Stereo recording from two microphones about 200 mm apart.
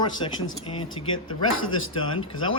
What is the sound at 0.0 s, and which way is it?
Speech, 20° left (ahead or behind).